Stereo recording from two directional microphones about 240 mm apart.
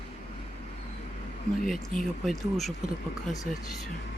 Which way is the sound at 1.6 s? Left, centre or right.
Centre.